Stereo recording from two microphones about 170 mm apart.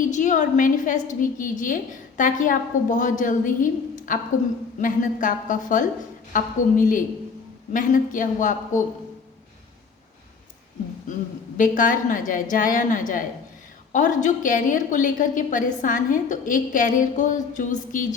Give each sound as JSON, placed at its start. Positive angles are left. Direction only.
{"t": 0.1, "sound": "a woman's voice", "side_deg": 45}
{"t": 11.1, "sound": "a woman's voice", "side_deg": 50}